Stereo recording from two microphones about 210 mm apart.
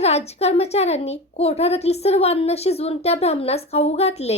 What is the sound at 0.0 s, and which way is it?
A woman's voice, 30° left (ahead or behind).